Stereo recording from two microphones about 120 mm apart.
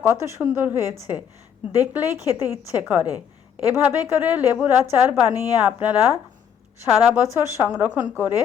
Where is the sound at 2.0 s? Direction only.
25° left (ahead or behind).